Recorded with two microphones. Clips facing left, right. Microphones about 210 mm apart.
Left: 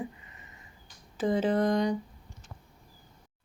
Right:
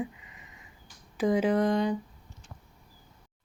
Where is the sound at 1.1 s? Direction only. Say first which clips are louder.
Right 2 dB; 10° right (ahead or behind).